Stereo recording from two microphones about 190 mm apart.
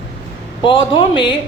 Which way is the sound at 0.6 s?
25° left (ahead or behind).